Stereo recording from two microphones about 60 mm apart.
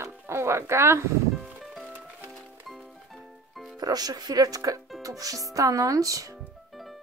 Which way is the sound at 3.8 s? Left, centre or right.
Right.